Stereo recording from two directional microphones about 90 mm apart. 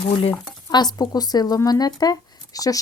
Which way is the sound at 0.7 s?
50° left (ahead or behind).